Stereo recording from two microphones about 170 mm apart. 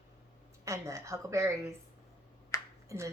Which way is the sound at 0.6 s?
20° right (ahead or behind).